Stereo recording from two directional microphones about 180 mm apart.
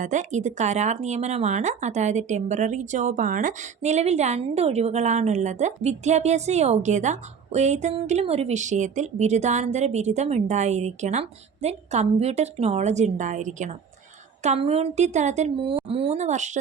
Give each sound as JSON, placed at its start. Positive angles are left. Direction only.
{"t": 0.0, "sound": "speech", "side_deg": -40}